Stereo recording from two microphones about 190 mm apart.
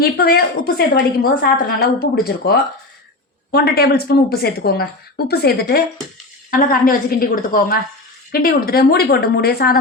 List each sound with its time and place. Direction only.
0.0 s a woman's voice: 55° left (ahead or behind)